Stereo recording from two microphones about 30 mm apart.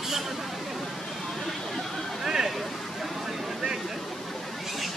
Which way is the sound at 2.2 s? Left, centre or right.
Centre.